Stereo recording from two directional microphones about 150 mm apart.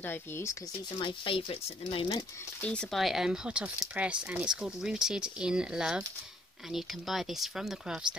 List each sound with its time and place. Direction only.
0.0 s speech: 15° left (ahead or behind)
0.9 s speech: 35° left (ahead or behind)
2.6 s speech: 5° left (ahead or behind)